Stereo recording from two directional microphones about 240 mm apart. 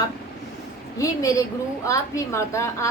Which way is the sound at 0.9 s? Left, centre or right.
Centre.